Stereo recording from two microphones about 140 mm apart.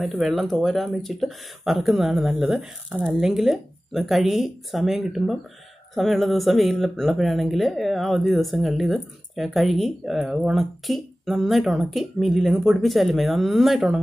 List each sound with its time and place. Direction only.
0.0 s speech: centre (ahead or behind)